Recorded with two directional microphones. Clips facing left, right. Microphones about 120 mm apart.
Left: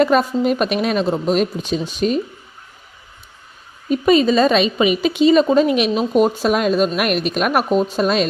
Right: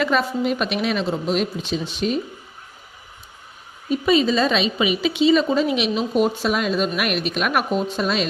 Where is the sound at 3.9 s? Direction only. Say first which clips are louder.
Left 4 dB; 50° left (ahead or behind).